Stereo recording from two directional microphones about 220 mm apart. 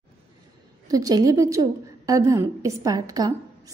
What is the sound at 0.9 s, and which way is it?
A woman's voice, 15° right (ahead or behind).